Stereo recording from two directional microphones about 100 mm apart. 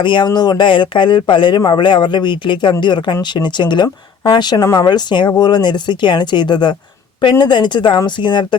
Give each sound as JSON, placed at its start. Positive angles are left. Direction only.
{"t": 0.0, "sound": "speech", "side_deg": 55}